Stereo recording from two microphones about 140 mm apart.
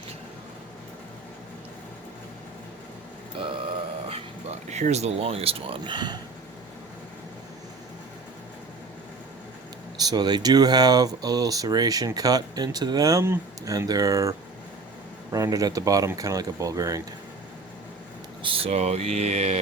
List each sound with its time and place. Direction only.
3.3 s a sound: 40° right (ahead or behind)
4.7 s speech: 55° right (ahead or behind); by 6.1 s 35° right (ahead or behind)
10.0 s speech: 30° right (ahead or behind)
18.4 s speech: 40° right (ahead or behind)